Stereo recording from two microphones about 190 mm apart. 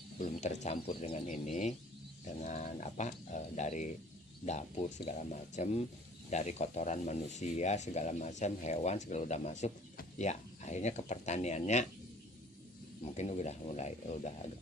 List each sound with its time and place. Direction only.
0.3 s speech: 40° left (ahead or behind)
5.0 s speech: 40° left (ahead or behind)
13.1 s speech: 35° left (ahead or behind)